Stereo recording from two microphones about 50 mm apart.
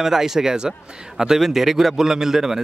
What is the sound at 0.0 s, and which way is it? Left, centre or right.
A man's voice, centre.